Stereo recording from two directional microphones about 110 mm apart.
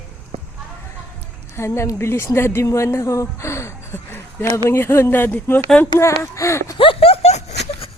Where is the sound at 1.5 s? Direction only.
25° left (ahead or behind).